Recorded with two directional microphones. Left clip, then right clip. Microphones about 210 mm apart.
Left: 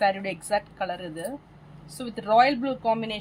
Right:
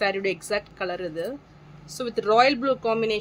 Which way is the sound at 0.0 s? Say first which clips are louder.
Even; 30° right (ahead or behind).